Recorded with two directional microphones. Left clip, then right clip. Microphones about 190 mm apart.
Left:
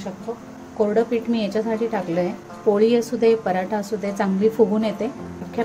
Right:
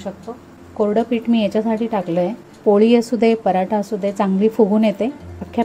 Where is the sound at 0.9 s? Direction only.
30° right (ahead or behind).